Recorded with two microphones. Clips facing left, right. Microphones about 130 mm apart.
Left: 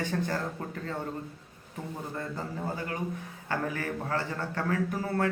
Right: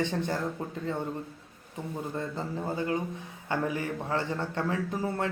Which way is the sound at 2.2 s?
20° right (ahead or behind).